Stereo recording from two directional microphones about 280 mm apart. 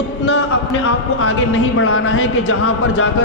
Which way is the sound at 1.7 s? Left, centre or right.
Left.